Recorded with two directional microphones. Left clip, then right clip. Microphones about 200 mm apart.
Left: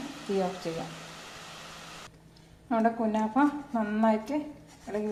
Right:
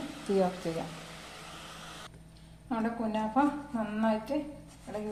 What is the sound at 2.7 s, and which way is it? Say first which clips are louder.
Speech: left 6 dB; 25° left (ahead or behind).